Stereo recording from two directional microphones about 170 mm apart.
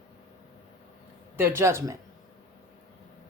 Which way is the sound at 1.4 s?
15° right (ahead or behind).